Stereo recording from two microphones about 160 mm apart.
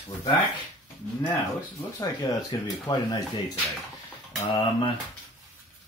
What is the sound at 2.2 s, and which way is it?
Speech, 20° left (ahead or behind).